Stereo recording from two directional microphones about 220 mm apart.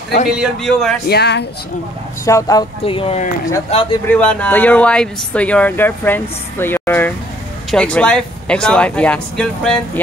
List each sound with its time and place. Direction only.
0.4 s speech: centre (ahead or behind)
1.0 s speech: 50° left (ahead or behind)
2.2 s speech: 15° left (ahead or behind)
4.1 s speech: 5° left (ahead or behind)